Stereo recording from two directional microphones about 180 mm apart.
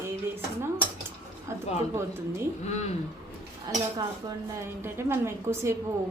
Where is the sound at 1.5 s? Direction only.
15° right (ahead or behind).